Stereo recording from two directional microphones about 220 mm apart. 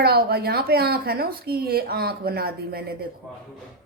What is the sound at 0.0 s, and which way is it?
Speech, 45° right (ahead or behind).